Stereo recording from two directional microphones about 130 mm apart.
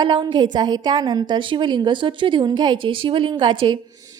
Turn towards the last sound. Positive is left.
turn(degrees=-40)  # may be behind; listen again after turning